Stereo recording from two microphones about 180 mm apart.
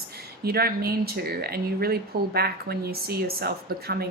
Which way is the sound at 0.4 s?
60° right (ahead or behind).